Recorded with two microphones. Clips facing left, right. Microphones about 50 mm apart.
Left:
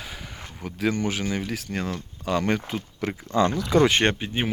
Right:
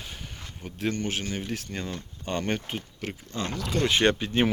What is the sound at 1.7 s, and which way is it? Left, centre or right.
Speech, left.